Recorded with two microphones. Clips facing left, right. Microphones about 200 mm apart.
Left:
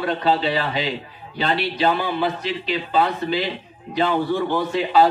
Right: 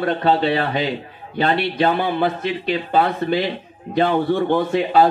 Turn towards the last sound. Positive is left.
turn(degrees=-55)  # may be behind; listen again after turning